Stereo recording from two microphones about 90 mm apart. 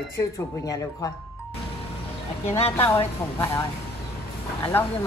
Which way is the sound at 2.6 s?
90° left.